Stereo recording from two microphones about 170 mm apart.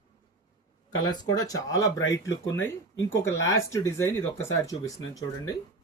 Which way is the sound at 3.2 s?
15° left (ahead or behind).